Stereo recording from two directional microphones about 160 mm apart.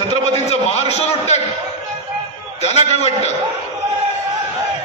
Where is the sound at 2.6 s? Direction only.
40° left (ahead or behind).